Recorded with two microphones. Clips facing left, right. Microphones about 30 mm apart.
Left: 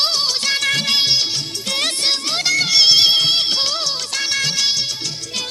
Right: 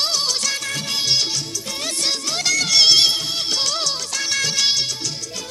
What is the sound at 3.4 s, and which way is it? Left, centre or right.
Music, left.